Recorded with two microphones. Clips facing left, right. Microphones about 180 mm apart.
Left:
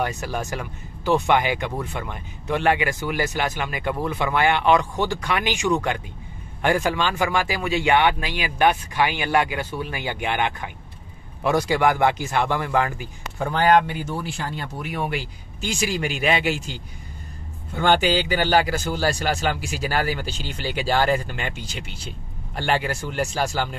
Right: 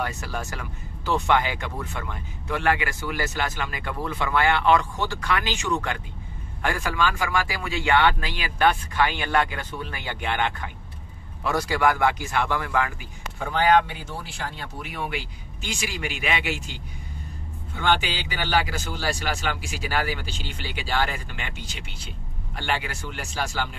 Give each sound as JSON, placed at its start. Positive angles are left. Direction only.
{"t": 0.0, "sound": "speech", "side_deg": 20}
{"t": 14.8, "sound": "speech", "side_deg": 45}
{"t": 17.7, "sound": "speech", "side_deg": 40}
{"t": 22.6, "sound": "speech", "side_deg": 40}